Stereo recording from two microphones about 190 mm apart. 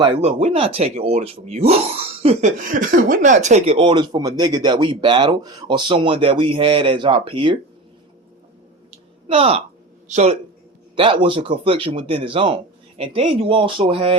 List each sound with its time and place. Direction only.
0.2 s speech: 35° right (ahead or behind)
9.2 s speech: 30° right (ahead or behind)